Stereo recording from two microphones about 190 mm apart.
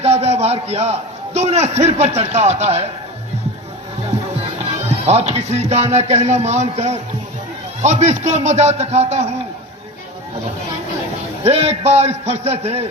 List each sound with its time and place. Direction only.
0.0 s a man's voice: 35° right (ahead or behind)
5.0 s a man's voice: 35° right (ahead or behind)
11.4 s a man's voice: 35° right (ahead or behind)